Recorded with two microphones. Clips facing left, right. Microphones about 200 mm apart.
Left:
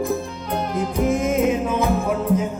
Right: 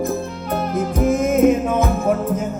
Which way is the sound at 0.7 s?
45° right (ahead or behind).